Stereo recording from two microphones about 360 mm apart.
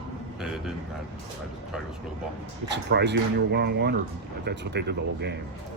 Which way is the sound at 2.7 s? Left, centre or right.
Right.